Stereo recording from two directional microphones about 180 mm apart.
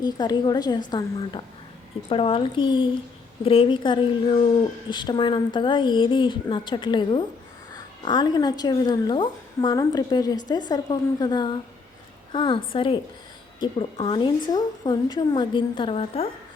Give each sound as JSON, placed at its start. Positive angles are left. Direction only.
{"t": 0.0, "sound": "a woman's voice", "side_deg": 20}